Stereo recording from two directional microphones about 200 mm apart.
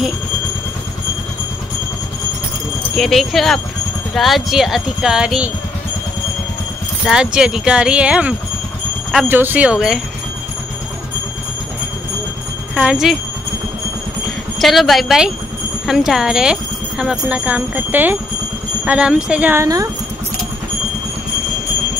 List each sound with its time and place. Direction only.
3.0 s speech: centre (ahead or behind)
7.1 s speech: 5° right (ahead or behind)
12.7 s speech: 5° right (ahead or behind)
14.6 s speech: centre (ahead or behind); by 19.9 s 15° right (ahead or behind)